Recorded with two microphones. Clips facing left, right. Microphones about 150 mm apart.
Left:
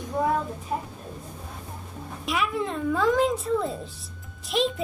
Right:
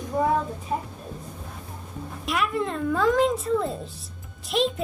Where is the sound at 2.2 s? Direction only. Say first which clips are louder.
Right 1 dB; centre (ahead or behind).